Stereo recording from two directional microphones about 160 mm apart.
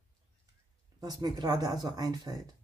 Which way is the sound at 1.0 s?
25° right (ahead or behind).